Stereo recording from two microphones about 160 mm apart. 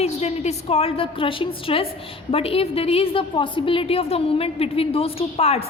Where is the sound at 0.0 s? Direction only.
40° left (ahead or behind).